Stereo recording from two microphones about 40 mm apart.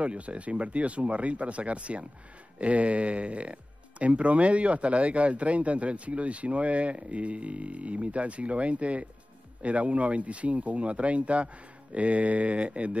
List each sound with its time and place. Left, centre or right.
0.0 s speech: right